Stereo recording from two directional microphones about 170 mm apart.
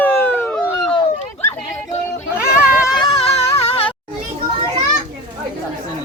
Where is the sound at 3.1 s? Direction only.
35° left (ahead or behind).